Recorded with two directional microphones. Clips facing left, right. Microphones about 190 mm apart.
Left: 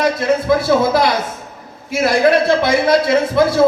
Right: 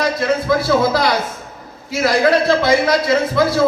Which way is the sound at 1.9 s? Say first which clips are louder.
Left 1 dB; 25° left (ahead or behind).